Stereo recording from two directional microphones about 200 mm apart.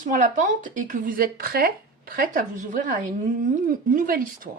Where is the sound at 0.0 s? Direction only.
40° right (ahead or behind).